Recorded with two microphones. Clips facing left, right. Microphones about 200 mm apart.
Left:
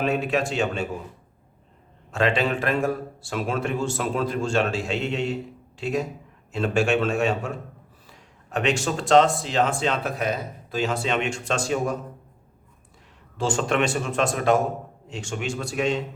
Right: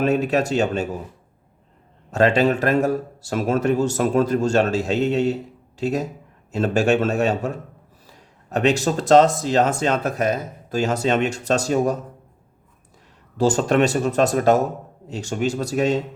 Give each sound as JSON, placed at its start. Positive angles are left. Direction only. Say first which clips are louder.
{"t": 0.0, "sound": "speech", "louder": "right 4 dB", "side_deg": -40}
{"t": 2.0, "sound": "speech", "louder": "right 6 dB", "side_deg": -40}
{"t": 13.3, "sound": "speech", "louder": "right 6 dB", "side_deg": -40}